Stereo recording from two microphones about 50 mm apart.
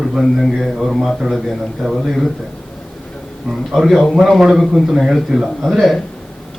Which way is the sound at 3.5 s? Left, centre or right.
Centre.